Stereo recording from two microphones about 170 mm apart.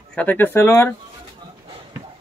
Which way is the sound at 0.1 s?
10° left (ahead or behind).